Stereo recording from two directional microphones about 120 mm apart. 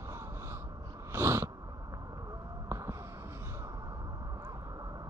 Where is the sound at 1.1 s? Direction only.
20° right (ahead or behind).